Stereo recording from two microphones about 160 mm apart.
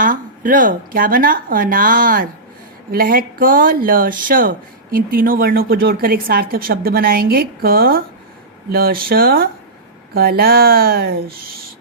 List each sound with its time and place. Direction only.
0.0 s speech: 55° right (ahead or behind)